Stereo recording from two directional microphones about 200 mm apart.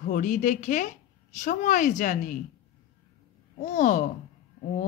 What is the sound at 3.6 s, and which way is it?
Speech, 40° left (ahead or behind).